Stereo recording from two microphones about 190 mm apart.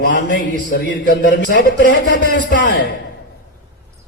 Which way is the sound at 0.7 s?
65° left (ahead or behind).